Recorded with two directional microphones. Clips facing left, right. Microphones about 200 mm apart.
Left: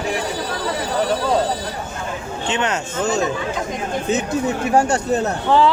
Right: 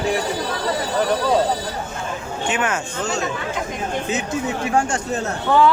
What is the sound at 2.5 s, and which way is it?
Speech, 25° left (ahead or behind).